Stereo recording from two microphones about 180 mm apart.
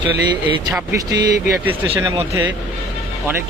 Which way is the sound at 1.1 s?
20° right (ahead or behind).